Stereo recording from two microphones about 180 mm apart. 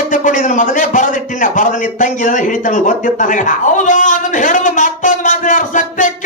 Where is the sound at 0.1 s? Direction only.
45° left (ahead or behind).